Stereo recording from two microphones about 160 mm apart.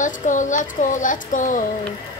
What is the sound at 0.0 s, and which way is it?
Speech, 50° left (ahead or behind).